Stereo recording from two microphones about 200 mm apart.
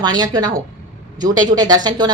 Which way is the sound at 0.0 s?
20° right (ahead or behind).